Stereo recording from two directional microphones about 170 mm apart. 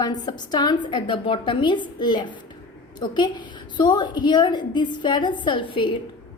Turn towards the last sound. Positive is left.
turn(degrees=30)  # may be behind; listen again after turning